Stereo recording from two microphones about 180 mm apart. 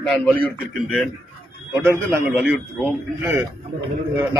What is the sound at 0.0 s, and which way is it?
Speech, centre (ahead or behind).